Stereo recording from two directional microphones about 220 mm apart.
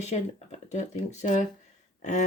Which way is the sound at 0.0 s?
30° left (ahead or behind).